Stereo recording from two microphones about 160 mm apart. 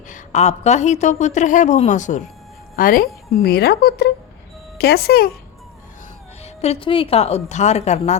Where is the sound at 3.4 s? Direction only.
80° left.